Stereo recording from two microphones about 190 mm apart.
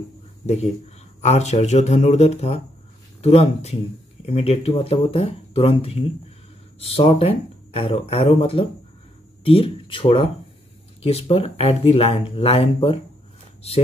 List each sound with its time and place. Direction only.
1.2 s speech: 35° left (ahead or behind)